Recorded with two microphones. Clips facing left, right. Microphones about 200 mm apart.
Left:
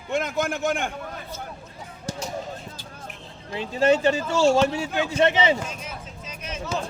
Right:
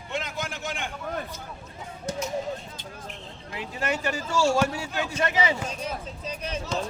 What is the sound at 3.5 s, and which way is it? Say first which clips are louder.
Speech: left 10 dB; 25° left (ahead or behind).